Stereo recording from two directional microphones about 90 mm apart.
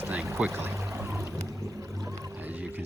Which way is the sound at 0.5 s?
25° right (ahead or behind).